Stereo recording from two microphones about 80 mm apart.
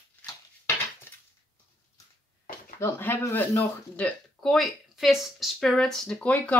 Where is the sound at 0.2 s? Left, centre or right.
Left.